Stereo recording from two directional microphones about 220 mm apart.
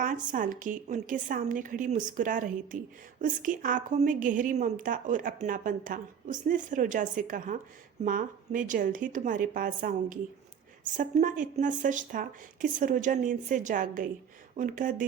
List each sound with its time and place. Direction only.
0.0 s a woman's voice: 35° right (ahead or behind)